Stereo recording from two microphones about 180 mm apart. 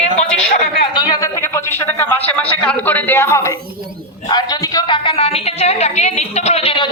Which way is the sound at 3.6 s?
55° right (ahead or behind).